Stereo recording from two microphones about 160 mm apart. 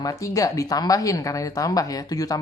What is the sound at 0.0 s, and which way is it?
Speech, 20° left (ahead or behind).